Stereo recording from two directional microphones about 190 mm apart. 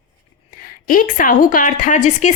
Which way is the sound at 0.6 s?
45° left (ahead or behind).